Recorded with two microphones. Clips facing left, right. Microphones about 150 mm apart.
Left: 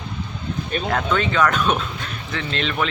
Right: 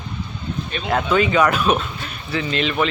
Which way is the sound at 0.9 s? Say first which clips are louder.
Right 5 dB; 5° right (ahead or behind).